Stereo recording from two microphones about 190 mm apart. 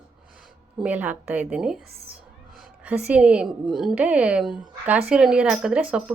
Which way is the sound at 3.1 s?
5° right (ahead or behind).